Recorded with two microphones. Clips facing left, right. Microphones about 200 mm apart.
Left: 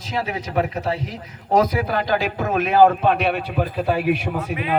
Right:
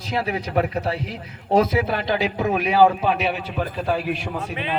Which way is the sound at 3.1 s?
55° left (ahead or behind).